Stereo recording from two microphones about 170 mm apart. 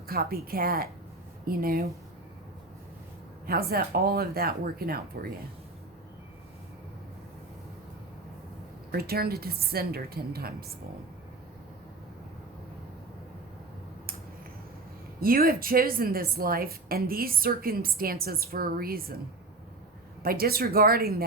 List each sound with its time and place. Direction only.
0.1 s a woman's voice: 60° right (ahead or behind)
3.4 s a woman's voice: 60° right (ahead or behind)
8.9 s a woman's voice: 65° right (ahead or behind)
15.2 s a woman's voice: 60° right (ahead or behind)
20.2 s a woman's voice: 60° right (ahead or behind)